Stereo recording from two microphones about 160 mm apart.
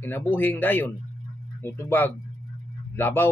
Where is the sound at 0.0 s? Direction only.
15° left (ahead or behind).